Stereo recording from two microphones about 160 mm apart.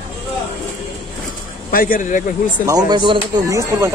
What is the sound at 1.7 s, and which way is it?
Speech, 60° left (ahead or behind).